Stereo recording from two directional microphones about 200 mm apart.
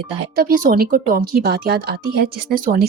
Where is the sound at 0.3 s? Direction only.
45° right (ahead or behind).